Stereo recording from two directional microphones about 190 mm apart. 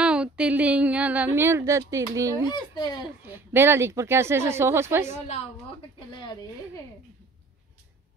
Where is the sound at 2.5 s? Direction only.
20° left (ahead or behind).